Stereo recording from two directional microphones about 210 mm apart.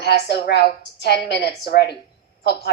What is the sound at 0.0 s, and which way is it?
A woman's voice, 50° left (ahead or behind).